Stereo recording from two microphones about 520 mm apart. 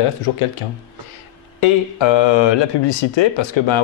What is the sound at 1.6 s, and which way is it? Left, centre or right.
Speech, left.